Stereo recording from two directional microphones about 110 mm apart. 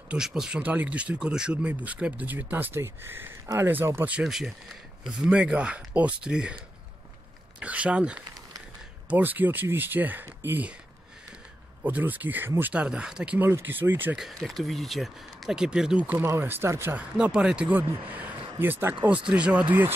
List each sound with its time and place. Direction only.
0.1 s speech: 5° right (ahead or behind)
4.1 s speech: 5° right (ahead or behind)
7.6 s speech: 10° right (ahead or behind)
11.8 s speech: 15° right (ahead or behind)
14.1 s speech: centre (ahead or behind)
16.2 s speech: 20° right (ahead or behind)